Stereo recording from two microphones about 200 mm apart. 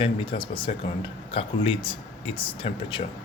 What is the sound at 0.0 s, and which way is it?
Speech, 25° left (ahead or behind).